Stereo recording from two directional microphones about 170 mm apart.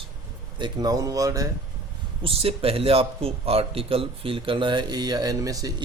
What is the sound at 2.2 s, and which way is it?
A man's voice, 35° right (ahead or behind).